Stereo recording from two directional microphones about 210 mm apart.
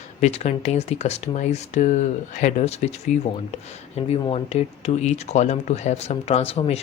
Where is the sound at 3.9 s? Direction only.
30° left (ahead or behind).